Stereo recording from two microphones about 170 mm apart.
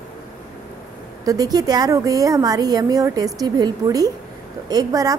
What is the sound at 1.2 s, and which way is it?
A woman's voice, 20° right (ahead or behind).